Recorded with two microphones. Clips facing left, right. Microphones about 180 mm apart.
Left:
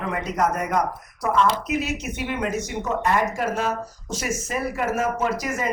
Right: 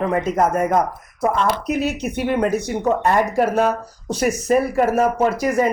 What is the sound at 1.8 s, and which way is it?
Speech, 60° right (ahead or behind).